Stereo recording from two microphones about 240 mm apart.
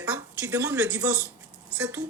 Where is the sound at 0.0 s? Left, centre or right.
Centre.